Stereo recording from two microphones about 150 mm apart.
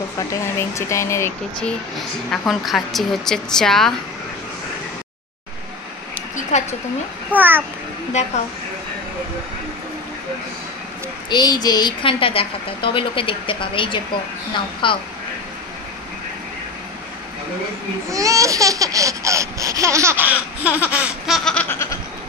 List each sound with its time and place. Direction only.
0.3 s speech: 20° left (ahead or behind)
1.6 s a woman's voice: 5° left (ahead or behind)
6.5 s speech: 50° left (ahead or behind)
7.3 s a child's voice: 15° right (ahead or behind)
8.2 s speech: 50° left (ahead or behind)
11.2 s a woman's voice: 30° left (ahead or behind)
18.1 s laughter: 20° right (ahead or behind)
21.5 s goat: 10° left (ahead or behind)